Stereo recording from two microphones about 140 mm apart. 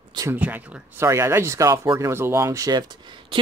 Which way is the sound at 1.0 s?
20° right (ahead or behind).